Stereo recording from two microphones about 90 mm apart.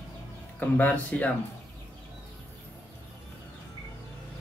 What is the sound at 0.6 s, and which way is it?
Speech, 15° left (ahead or behind).